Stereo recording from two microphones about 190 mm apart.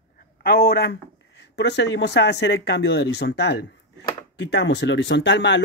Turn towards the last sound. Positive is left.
turn(degrees=70)  # may be behind; listen again after turning